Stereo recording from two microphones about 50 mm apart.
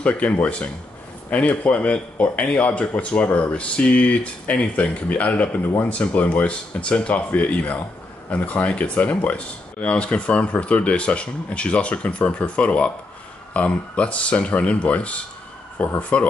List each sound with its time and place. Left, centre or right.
0.0 s speech: left